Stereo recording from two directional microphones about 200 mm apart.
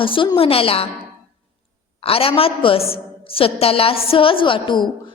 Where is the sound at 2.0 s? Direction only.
30° left (ahead or behind).